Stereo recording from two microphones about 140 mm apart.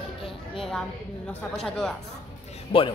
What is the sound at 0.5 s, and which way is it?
A woman's voice, 5° left (ahead or behind).